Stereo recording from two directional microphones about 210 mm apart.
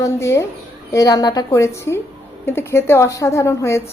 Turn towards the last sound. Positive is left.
turn(degrees=15)  # may be behind; listen again after turning